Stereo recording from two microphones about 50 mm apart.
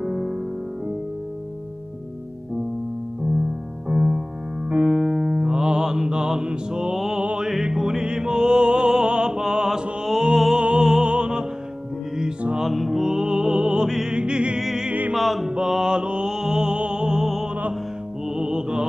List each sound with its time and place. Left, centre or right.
0.0 s music: centre
3.9 s music: centre
12.5 s music: centre
14.6 s music: centre
14.9 s music: right
15.1 s music: centre
15.5 s music: centre